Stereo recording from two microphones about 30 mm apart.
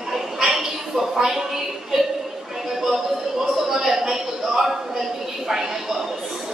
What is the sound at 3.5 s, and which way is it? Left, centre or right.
A man's voice, centre.